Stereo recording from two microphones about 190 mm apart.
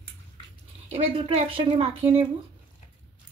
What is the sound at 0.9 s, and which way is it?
Speech, 30° right (ahead or behind).